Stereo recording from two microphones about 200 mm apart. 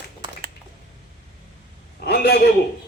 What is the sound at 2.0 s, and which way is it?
Speech, 55° left (ahead or behind).